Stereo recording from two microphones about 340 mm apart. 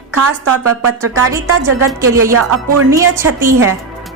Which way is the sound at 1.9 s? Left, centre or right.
Centre.